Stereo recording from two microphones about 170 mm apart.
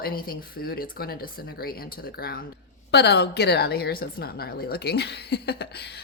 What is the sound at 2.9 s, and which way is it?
A woman's voice, 80° left.